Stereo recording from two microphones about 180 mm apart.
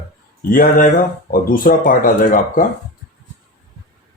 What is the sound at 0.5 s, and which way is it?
Speech, 50° left (ahead or behind).